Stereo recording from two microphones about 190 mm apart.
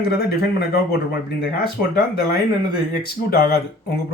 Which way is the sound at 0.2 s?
55° left (ahead or behind).